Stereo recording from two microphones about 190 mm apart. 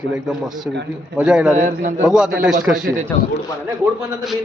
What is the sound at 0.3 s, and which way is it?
A man's voice, centre (ahead or behind).